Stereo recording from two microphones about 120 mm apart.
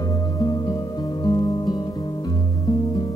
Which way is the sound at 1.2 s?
35° left (ahead or behind).